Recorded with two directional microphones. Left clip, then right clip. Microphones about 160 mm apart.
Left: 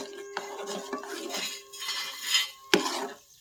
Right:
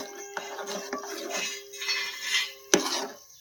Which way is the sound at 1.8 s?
85° left.